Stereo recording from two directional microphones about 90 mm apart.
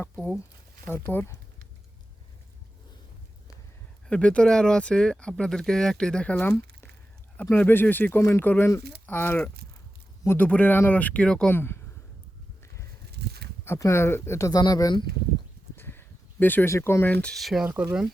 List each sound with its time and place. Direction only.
0.9 s speech: 25° left (ahead or behind)
4.1 s speech: 10° left (ahead or behind)
6.3 s speech: 20° left (ahead or behind)
11.5 s speech: 25° left (ahead or behind)
12.6 s a sound: 35° left (ahead or behind)
13.7 s speech: 35° left (ahead or behind)
14.6 s speech: 45° left (ahead or behind)
15.7 s a sound: 25° left (ahead or behind)
16.7 s speech: 30° left (ahead or behind)
17.3 s speech: centre (ahead or behind)